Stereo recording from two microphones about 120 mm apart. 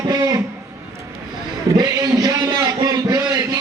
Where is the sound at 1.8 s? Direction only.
30° right (ahead or behind).